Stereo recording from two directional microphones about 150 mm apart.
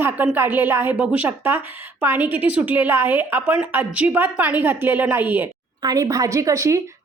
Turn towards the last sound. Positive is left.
turn(degrees=-20)  # may be behind; listen again after turning